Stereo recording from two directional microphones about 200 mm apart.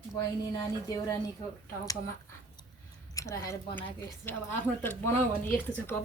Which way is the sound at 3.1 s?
15° left (ahead or behind).